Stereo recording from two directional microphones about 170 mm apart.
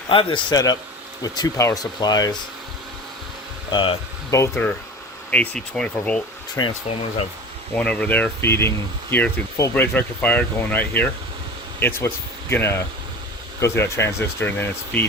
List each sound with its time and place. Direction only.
0.1 s speech: 30° left (ahead or behind)
3.7 s speech: 30° left (ahead or behind)
4.3 s speech: 15° left (ahead or behind)
5.3 s speech: 5° left (ahead or behind)
6.6 s speech: 20° left (ahead or behind)
7.7 s speech: 10° left (ahead or behind)